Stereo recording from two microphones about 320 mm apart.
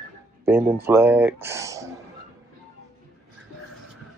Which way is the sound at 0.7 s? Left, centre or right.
Centre.